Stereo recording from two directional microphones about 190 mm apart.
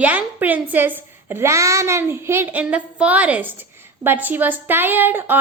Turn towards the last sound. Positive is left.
turn(degrees=-10)  # may be behind; listen again after turning